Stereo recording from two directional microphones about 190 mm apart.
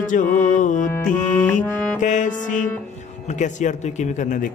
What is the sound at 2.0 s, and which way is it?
Music, 40° left (ahead or behind).